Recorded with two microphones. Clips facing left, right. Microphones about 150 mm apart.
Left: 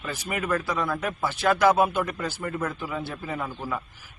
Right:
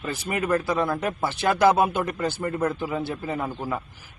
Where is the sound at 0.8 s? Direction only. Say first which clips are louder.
Right 3 dB; 30° right (ahead or behind).